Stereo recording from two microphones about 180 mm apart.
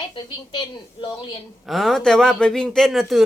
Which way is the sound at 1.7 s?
Centre (ahead or behind).